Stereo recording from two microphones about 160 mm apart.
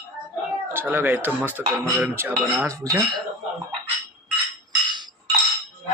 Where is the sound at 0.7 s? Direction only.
10° right (ahead or behind).